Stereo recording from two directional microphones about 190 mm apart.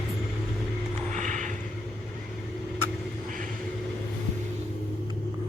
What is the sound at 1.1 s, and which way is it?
Vehicle, 40° right (ahead or behind).